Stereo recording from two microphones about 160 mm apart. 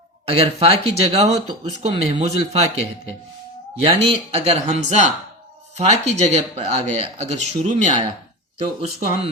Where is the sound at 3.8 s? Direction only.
35° right (ahead or behind).